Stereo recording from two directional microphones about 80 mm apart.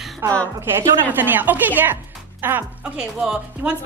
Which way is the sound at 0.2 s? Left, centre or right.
Right.